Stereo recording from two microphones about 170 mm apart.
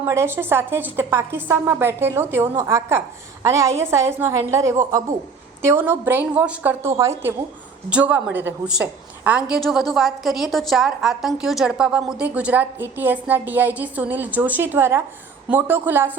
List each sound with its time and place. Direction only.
0.0 s a woman's voice: 15° right (ahead or behind)